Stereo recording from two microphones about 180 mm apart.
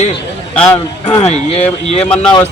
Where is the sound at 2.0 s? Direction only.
5° left (ahead or behind).